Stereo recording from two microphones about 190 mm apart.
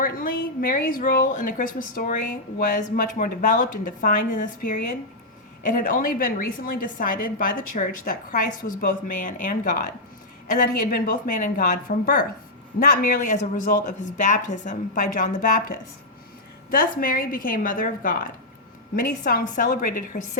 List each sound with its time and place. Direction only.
0.0 s a woman's voice: 45° left (ahead or behind)